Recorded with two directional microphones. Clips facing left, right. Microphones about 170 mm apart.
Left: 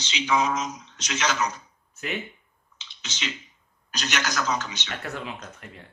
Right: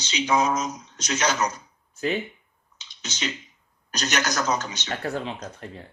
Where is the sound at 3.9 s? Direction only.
40° right (ahead or behind).